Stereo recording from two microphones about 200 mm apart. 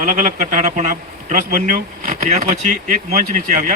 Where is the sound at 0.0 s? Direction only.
40° right (ahead or behind).